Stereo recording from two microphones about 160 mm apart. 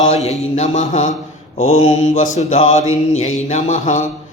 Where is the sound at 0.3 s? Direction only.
45° left (ahead or behind).